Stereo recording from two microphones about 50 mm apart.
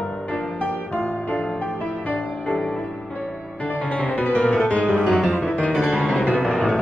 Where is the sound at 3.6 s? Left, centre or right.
Left.